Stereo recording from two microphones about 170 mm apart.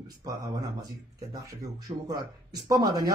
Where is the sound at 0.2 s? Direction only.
20° right (ahead or behind).